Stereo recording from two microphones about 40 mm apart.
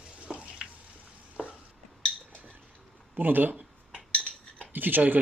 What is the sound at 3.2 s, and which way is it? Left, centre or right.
Speech, right.